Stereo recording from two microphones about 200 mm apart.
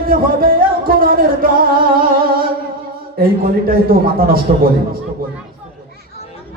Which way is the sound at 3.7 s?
45° right (ahead or behind).